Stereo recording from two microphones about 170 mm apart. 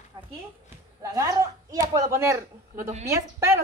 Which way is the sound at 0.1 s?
20° right (ahead or behind).